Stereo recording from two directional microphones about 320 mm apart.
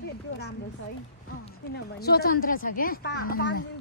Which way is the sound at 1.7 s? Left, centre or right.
Left.